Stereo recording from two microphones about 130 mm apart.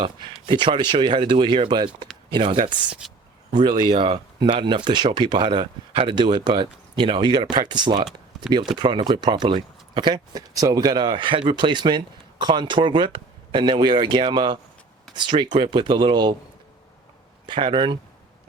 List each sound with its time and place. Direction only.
0.0 s speech: 40° right (ahead or behind)
17.4 s speech: 40° right (ahead or behind)